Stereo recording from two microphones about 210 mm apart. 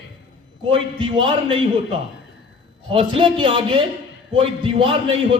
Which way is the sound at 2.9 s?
25° right (ahead or behind).